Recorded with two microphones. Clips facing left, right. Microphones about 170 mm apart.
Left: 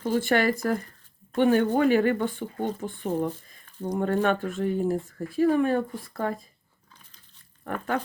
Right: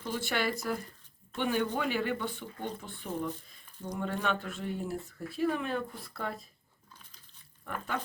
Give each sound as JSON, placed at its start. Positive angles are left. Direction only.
{"t": 0.0, "sound": "speech", "side_deg": 50}
{"t": 7.6, "sound": "speech", "side_deg": 55}